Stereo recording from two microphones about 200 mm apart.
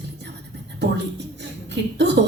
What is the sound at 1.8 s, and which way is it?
Speech, 60° right (ahead or behind).